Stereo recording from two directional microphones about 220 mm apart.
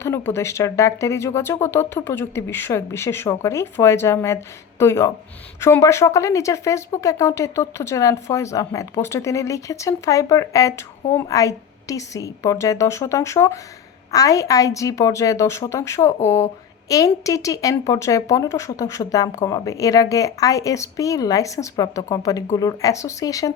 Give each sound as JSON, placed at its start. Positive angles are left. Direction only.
{"t": 0.0, "sound": "speech", "side_deg": 10}